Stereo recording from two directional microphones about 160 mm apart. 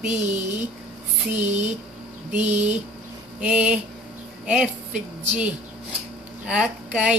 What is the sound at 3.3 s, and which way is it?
A woman's voice, 5° right (ahead or behind).